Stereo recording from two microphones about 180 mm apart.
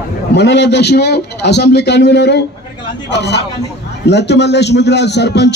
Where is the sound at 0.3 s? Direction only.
70° left (ahead or behind).